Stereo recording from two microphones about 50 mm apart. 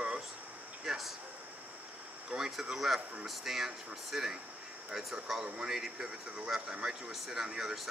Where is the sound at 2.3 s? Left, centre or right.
Centre.